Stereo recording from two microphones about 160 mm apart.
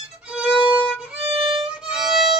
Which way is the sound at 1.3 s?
35° right (ahead or behind).